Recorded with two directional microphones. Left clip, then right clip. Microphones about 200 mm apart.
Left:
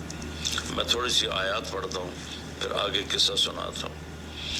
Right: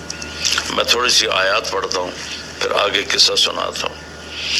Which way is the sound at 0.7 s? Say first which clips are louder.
Right 10 dB; 30° right (ahead or behind).